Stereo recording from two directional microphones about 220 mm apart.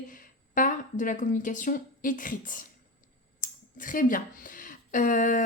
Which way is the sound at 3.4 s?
35° left (ahead or behind).